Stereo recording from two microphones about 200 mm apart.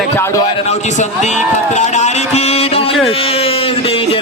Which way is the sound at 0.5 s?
35° left (ahead or behind).